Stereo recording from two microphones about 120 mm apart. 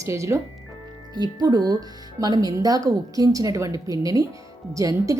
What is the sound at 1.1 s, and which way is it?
A woman's voice, 35° right (ahead or behind).